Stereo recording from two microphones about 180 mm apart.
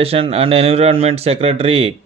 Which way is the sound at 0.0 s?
35° right (ahead or behind).